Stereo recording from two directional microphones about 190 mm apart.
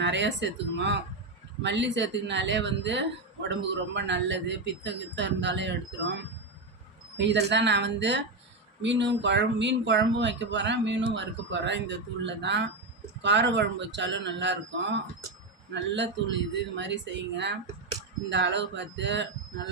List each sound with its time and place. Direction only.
0.0 s speech: 65° right (ahead or behind)
7.2 s speech: 70° right (ahead or behind)
15.7 s speech: 70° right (ahead or behind)